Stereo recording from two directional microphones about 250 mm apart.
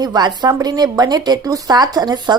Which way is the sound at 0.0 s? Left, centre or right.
Centre.